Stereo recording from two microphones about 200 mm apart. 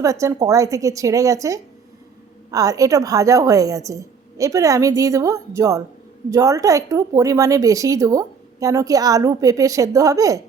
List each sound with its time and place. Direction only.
0.0 s a woman's voice: 15° right (ahead or behind)